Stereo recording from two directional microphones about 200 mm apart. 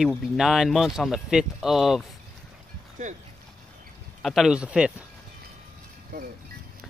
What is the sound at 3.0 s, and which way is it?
Speech, 40° right (ahead or behind).